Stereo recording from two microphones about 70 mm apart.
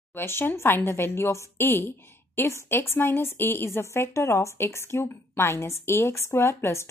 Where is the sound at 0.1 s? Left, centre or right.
Left.